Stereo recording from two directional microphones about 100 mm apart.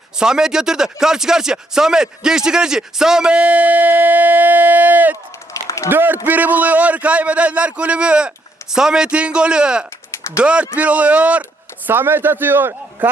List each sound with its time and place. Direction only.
0.2 s speech: 5° right (ahead or behind)
5.6 s a sound: 30° left (ahead or behind)
5.9 s a man's voice: 20° right (ahead or behind)